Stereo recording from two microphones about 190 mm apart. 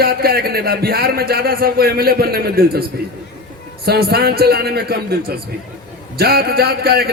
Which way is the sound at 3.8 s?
55° right (ahead or behind).